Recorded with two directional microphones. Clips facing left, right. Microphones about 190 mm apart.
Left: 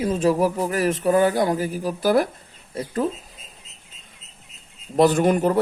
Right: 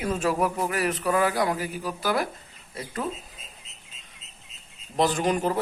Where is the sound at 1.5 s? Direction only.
40° left (ahead or behind).